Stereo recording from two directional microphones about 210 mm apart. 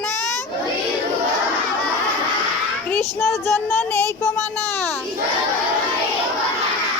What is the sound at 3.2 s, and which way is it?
Speech, 10° left (ahead or behind).